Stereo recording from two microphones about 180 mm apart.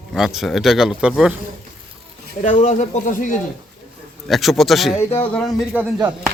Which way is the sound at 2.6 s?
40° left (ahead or behind).